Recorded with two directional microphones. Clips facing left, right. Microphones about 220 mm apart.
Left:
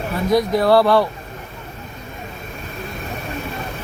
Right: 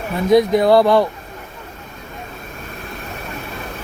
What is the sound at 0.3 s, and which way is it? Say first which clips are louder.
Speech: right 3 dB; 20° right (ahead or behind).